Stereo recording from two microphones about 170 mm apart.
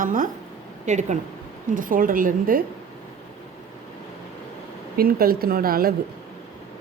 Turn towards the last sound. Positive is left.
turn(degrees=-60)  # may be behind; listen again after turning